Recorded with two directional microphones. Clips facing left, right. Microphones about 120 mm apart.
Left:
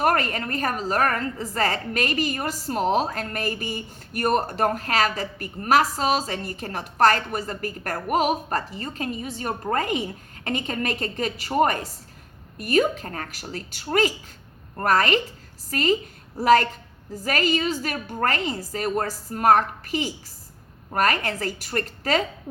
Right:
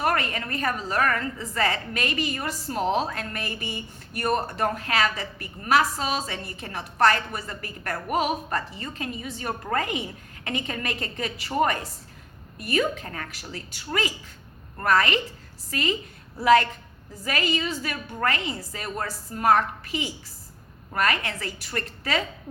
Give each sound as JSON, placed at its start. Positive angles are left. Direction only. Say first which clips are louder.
{"t": 0.0, "sound": "a woman's voice", "louder": "left 3 dB", "side_deg": 45}